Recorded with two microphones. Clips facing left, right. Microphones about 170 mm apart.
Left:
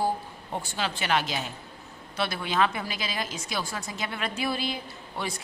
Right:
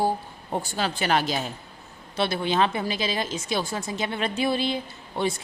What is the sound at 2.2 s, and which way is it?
A woman's voice, 25° right (ahead or behind).